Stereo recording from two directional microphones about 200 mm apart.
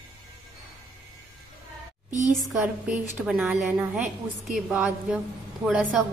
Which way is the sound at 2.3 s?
Centre (ahead or behind).